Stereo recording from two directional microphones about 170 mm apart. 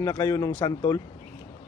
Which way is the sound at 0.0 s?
25° left (ahead or behind).